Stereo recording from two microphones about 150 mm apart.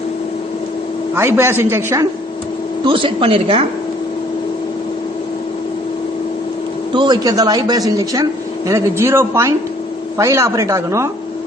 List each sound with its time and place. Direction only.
1.1 s a woman's voice: 15° right (ahead or behind)
2.8 s a woman's voice: 35° right (ahead or behind)
6.9 s a man's voice: 30° right (ahead or behind)